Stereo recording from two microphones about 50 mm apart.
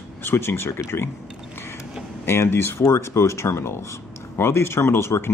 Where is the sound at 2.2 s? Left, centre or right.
Left.